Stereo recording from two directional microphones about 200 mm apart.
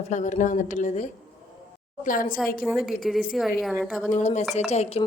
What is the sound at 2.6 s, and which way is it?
A woman's voice, centre (ahead or behind).